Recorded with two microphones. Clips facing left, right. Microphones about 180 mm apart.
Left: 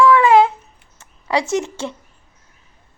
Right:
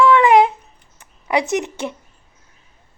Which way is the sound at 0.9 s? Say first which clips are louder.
Right 1 dB; 20° right (ahead or behind).